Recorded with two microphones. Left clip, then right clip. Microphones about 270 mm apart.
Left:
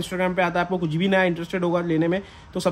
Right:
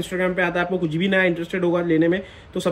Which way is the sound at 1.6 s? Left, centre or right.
Left.